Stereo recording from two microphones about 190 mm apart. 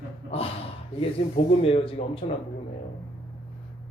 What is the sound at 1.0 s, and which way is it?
Speech, 30° left (ahead or behind).